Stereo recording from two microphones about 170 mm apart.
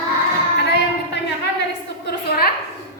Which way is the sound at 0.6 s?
90° left.